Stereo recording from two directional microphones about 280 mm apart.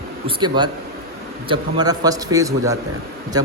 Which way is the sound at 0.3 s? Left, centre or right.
Centre.